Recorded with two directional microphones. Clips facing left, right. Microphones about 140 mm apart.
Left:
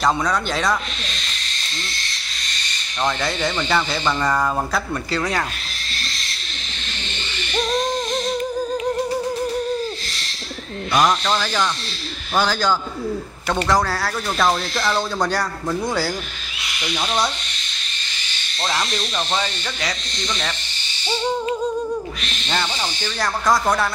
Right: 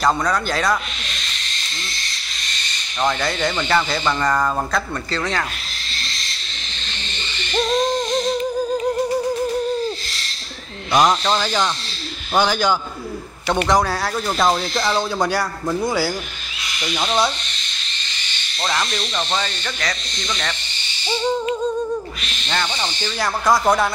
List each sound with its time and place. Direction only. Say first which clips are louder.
0.0 s speech: right 1 dB; centre (ahead or behind)
3.0 s speech: right 2 dB; centre (ahead or behind)
10.9 s speech: right 2 dB; 20° right (ahead or behind)
18.6 s speech: right 1 dB; 10° left (ahead or behind)
22.5 s speech: even; 5° left (ahead or behind)
23.0 s speech: right 1 dB; 10° right (ahead or behind)